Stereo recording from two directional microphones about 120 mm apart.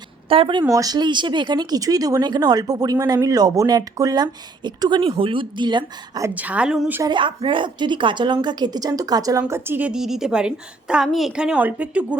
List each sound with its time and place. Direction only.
0.3 s speech: 45° right (ahead or behind)
0.7 s speech: 30° right (ahead or behind)
6.3 s a woman's voice: 10° right (ahead or behind)
7.0 s speech: 40° right (ahead or behind)
9.5 s a woman's voice: 20° right (ahead or behind)